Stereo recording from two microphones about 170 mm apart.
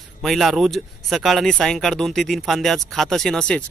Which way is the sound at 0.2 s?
Centre (ahead or behind).